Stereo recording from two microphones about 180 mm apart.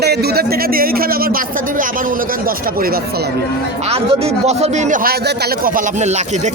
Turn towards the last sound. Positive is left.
turn(degrees=-40)  # may be behind; listen again after turning